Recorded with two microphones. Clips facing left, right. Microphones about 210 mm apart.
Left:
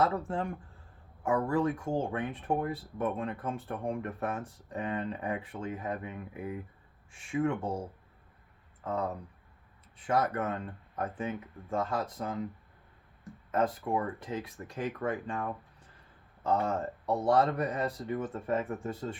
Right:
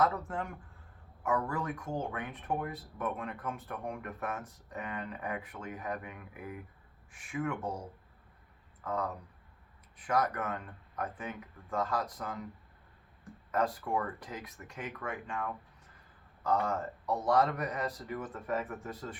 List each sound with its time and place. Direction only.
0.0 s speech: 30° left (ahead or behind)
13.5 s speech: 25° left (ahead or behind)